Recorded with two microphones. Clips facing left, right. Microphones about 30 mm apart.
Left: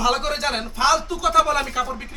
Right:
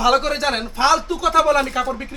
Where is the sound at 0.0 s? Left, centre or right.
Centre.